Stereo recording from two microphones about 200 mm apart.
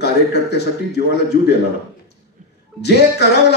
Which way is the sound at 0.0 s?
55° left (ahead or behind).